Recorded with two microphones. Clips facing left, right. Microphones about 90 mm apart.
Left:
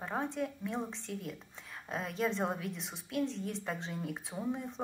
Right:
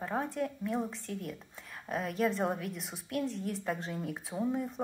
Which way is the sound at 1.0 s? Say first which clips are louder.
Right 2 dB; 55° right (ahead or behind).